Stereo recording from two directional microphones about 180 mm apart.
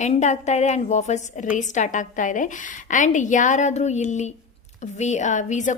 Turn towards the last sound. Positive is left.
turn(degrees=40)  # may be behind; listen again after turning